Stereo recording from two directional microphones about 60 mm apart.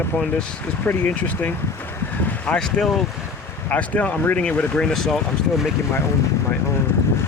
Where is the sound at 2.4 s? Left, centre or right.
Centre.